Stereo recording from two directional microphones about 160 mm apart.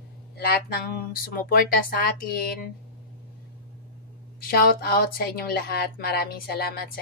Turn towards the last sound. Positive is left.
turn(degrees=75)  # may be behind; listen again after turning